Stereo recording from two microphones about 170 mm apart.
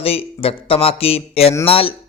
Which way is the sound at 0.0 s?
35° left (ahead or behind).